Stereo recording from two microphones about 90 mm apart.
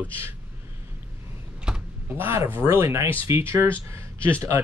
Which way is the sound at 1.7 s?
5° right (ahead or behind).